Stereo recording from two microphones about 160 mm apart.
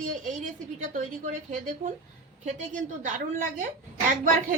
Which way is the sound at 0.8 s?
50° right (ahead or behind).